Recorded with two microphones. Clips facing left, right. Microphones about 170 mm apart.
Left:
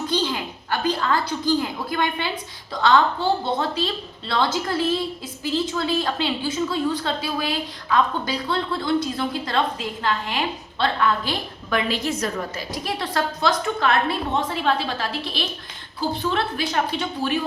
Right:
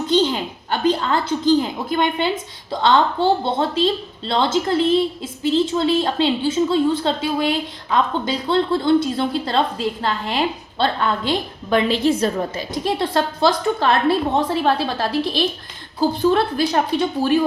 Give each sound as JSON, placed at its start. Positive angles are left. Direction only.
{"t": 0.1, "sound": "a woman's voice", "side_deg": -20}